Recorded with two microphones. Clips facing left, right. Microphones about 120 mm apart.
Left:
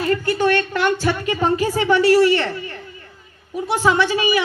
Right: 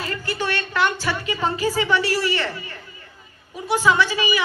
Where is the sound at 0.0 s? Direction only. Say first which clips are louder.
Left 8 dB; 50° left (ahead or behind).